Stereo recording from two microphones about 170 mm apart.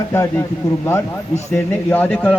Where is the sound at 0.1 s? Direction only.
15° left (ahead or behind).